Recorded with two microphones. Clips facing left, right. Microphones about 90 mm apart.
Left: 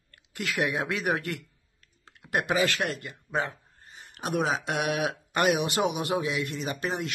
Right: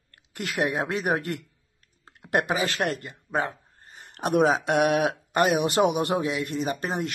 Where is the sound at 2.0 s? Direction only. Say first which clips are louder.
Right 4 dB; 50° right (ahead or behind).